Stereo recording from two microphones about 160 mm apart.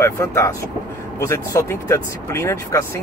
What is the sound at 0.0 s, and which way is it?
Speech, 15° left (ahead or behind).